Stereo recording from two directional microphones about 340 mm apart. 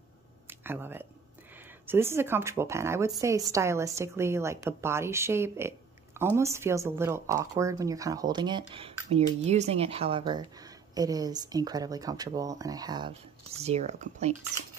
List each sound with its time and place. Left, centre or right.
0.5 s speech: centre